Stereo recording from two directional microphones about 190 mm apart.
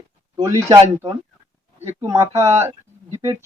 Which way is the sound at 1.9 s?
15° right (ahead or behind).